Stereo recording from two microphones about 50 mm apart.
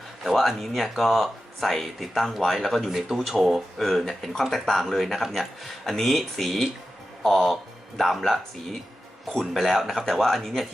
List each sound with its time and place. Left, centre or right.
0.3 s speech: centre